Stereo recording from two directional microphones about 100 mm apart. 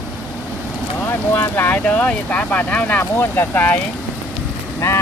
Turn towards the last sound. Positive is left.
turn(degrees=30)  # may be behind; listen again after turning